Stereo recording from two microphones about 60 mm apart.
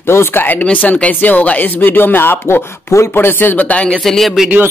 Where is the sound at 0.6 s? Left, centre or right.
Left.